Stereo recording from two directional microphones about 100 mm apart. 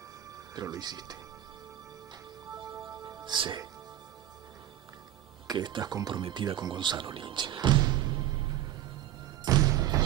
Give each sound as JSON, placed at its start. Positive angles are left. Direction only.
{"t": 0.6, "sound": "speech", "side_deg": -45}
{"t": 2.5, "sound": "music", "side_deg": -45}
{"t": 5.5, "sound": "speech", "side_deg": -45}
{"t": 9.4, "sound": "thump", "side_deg": -40}